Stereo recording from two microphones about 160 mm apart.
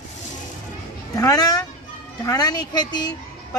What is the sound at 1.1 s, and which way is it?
Speech, 20° left (ahead or behind).